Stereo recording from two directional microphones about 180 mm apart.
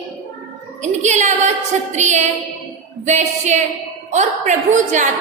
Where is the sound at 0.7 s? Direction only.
40° right (ahead or behind).